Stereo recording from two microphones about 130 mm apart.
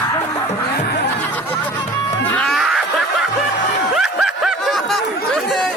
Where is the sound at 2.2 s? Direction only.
10° left (ahead or behind).